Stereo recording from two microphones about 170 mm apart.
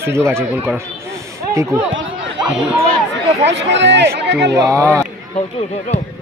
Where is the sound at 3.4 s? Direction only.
90° right.